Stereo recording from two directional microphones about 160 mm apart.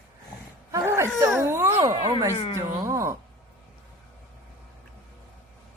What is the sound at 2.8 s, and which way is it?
Speech, 20° right (ahead or behind).